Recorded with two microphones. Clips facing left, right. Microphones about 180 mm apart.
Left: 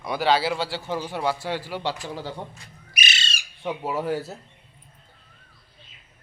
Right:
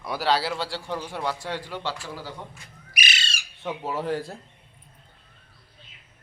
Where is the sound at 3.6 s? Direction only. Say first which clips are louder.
Left 2 dB; 10° left (ahead or behind).